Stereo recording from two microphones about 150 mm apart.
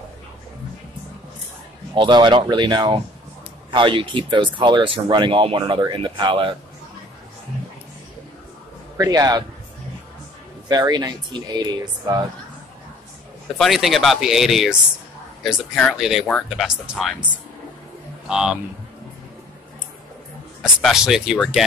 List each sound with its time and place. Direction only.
2.0 s speech: 30° right (ahead or behind)
8.9 s speech: 25° right (ahead or behind)
10.7 s speech: 25° right (ahead or behind)
13.6 s speech: centre (ahead or behind)
20.6 s speech: 5° right (ahead or behind)